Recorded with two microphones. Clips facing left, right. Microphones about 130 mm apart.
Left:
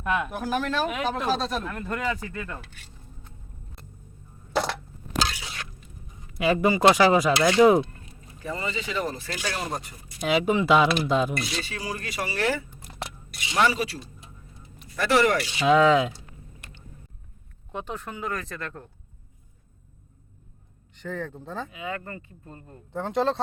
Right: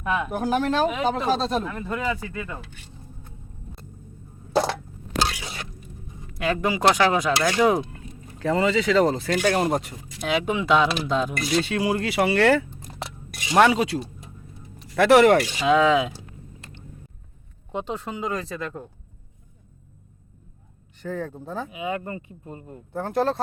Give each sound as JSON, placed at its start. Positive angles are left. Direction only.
{"t": 0.0, "sound": "speech", "side_deg": 0}
{"t": 0.3, "sound": "speech", "side_deg": -30}
{"t": 1.6, "sound": "speech", "side_deg": -5}
{"t": 6.3, "sound": "speech", "side_deg": 5}
{"t": 8.4, "sound": "speech", "side_deg": -90}
{"t": 10.2, "sound": "speech", "side_deg": 5}
{"t": 11.4, "sound": "speech", "side_deg": -60}
{"t": 13.3, "sound": "music", "side_deg": -45}
{"t": 13.6, "sound": "speech", "side_deg": -80}
{"t": 15.6, "sound": "speech", "side_deg": 0}
{"t": 17.7, "sound": "speech", "side_deg": -20}
{"t": 20.9, "sound": "speech", "side_deg": -10}
{"t": 22.9, "sound": "speech", "side_deg": -5}